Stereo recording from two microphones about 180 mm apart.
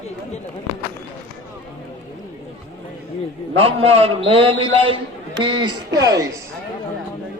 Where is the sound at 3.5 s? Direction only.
30° right (ahead or behind).